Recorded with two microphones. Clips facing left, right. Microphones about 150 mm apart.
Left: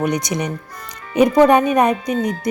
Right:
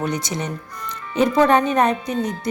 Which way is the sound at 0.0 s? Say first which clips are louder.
Left 4 dB; 15° left (ahead or behind).